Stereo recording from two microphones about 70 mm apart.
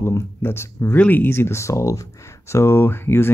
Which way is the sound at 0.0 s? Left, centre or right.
Left.